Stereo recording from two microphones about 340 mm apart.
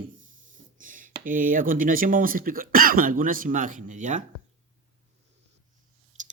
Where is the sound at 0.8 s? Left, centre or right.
Right.